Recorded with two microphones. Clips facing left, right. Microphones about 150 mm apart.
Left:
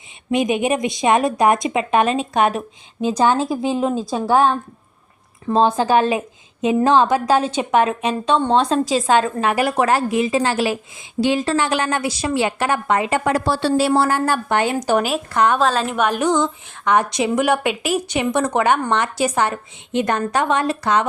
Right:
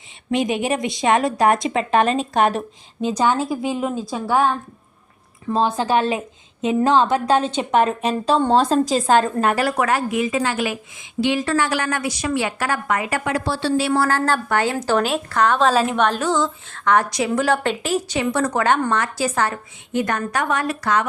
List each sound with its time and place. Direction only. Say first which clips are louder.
0.3 s a woman's voice: left 2 dB; 20° left (ahead or behind)
3.1 s a woman's voice: left 2 dB; 20° left (ahead or behind)
5.5 s a woman's voice: left 3 dB; 20° left (ahead or behind)
8.2 s a woman's voice: even; centre (ahead or behind)
9.6 s a woman's voice: left 2 dB; 20° left (ahead or behind)
9.8 s a woman's voice: left 3 dB; 30° left (ahead or behind)
13.2 s speech: left 3 dB; 45° left (ahead or behind)
14.1 s a woman's voice: left 1 dB; 15° left (ahead or behind)
15.6 s a woman's voice: right 2 dB; centre (ahead or behind)
16.0 s a woman's voice: left 1 dB; 15° left (ahead or behind)